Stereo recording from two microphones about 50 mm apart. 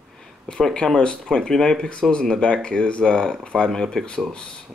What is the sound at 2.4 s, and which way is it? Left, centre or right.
Speech, left.